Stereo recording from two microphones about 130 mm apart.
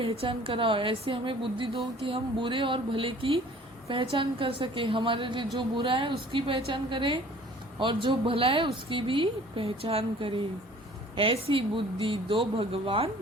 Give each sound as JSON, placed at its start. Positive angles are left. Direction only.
{"t": 0.0, "sound": "a woman's voice", "side_deg": -45}